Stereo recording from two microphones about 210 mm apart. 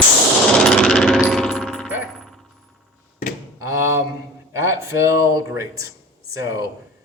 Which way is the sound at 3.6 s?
15° right (ahead or behind).